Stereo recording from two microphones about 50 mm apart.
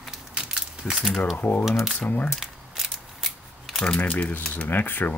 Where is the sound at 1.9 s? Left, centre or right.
Left.